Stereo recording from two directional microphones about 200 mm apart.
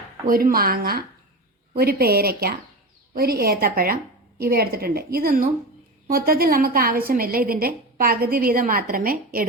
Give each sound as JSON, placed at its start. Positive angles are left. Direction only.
{"t": 0.3, "sound": "a woman's voice", "side_deg": -45}